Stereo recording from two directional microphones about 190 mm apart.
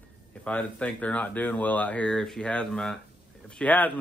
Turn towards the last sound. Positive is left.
turn(degrees=10)  # may be behind; listen again after turning